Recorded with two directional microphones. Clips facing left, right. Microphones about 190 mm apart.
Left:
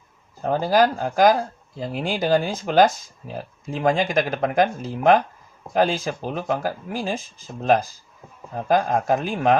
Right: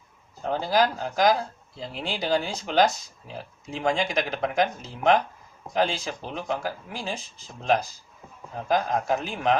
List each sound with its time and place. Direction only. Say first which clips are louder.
0.4 s speech: left 5 dB; 50° left (ahead or behind)